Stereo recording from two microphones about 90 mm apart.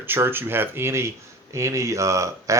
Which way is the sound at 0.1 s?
25° right (ahead or behind).